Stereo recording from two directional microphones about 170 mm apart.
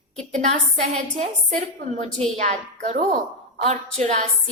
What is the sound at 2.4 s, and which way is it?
Speech, 40° right (ahead or behind).